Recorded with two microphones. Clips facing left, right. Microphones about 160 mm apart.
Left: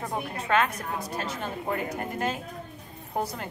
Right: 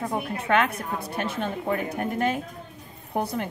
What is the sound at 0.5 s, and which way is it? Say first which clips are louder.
A woman's voice: right 2 dB; 60° right (ahead or behind).